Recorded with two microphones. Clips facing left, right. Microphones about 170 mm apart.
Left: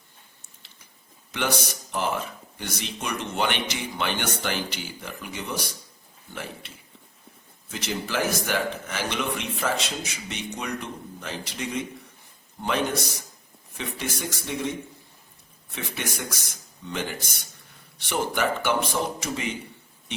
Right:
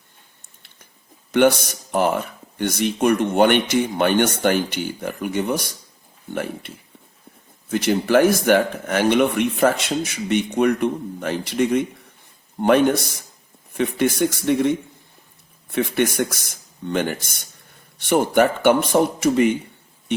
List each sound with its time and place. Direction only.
1.3 s speech: 55° right (ahead or behind)